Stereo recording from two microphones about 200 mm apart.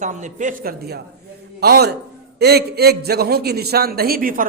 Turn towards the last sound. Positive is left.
turn(degrees=-45)  # may be behind; listen again after turning